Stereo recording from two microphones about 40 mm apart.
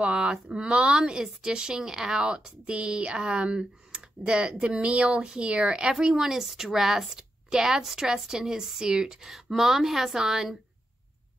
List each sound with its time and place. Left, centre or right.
0.0 s speech: right
9.3 s speech: centre